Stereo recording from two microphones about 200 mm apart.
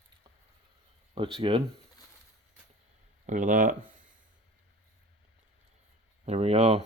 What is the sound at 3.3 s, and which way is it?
Speech, 40° right (ahead or behind).